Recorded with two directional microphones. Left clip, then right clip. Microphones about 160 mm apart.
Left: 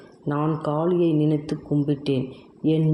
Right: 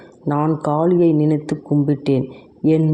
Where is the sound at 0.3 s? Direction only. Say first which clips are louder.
Right 6 dB; 25° right (ahead or behind).